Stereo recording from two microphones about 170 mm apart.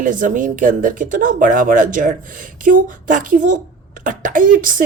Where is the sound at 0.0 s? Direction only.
50° right (ahead or behind).